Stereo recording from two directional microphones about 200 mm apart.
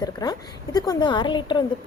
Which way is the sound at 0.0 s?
20° left (ahead or behind).